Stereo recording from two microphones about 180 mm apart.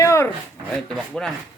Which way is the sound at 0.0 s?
15° left (ahead or behind).